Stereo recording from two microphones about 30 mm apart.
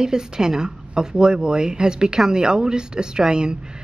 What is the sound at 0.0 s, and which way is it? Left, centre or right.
Speech, right.